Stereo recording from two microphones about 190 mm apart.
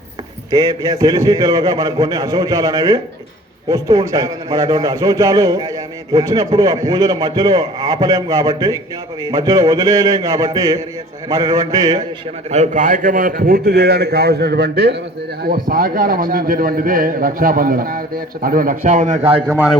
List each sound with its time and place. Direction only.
0.5 s a man's voice: 15° right (ahead or behind)
12.5 s a man's voice: 40° right (ahead or behind); by 15.0 s 60° right (ahead or behind)
15.4 s a man's voice: 50° right (ahead or behind); by 19.5 s 30° right (ahead or behind)
19.5 s a man's voice: 10° right (ahead or behind)